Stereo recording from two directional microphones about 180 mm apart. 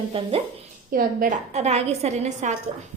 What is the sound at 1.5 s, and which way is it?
A woman's voice, 35° right (ahead or behind).